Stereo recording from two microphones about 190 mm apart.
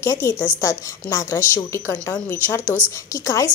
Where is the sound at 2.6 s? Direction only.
10° right (ahead or behind).